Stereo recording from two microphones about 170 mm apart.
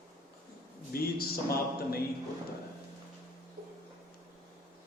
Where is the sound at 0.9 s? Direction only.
65° left (ahead or behind).